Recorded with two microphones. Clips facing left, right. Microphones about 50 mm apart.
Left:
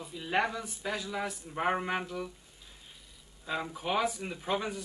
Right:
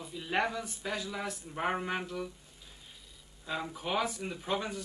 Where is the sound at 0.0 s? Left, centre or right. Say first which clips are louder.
Left 1 dB; centre.